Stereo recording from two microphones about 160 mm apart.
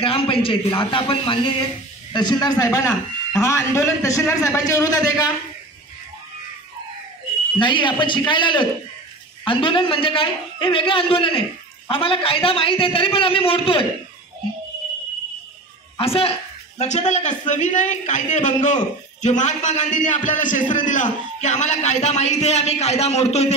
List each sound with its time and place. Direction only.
0.0 s a man's voice: 35° left (ahead or behind)
7.5 s a man's voice: 30° left (ahead or behind)
16.0 s speech: 35° left (ahead or behind)